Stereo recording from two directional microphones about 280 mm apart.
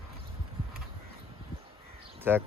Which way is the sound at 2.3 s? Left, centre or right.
Centre.